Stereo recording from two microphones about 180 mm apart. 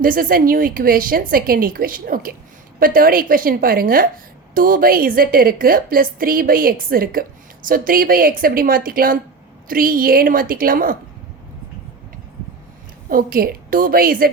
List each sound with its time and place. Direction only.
0.0 s a woman's voice: 50° right (ahead or behind)
13.1 s a woman's voice: 55° right (ahead or behind)